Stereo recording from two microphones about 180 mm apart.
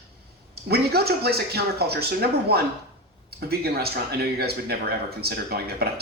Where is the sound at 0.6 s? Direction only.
60° right (ahead or behind).